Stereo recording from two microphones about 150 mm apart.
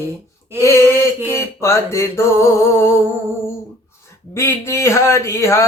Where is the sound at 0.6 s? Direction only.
20° left (ahead or behind).